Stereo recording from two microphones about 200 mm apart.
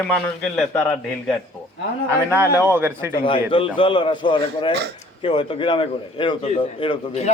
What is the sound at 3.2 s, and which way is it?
A man's voice, 25° left (ahead or behind).